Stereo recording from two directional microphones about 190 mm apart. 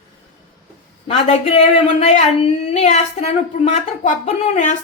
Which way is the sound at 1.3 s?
35° left (ahead or behind).